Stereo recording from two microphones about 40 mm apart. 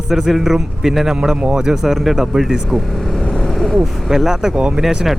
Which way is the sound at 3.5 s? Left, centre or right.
Centre.